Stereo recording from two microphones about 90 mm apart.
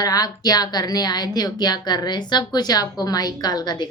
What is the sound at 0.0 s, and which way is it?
A woman's voice, 45° left (ahead or behind).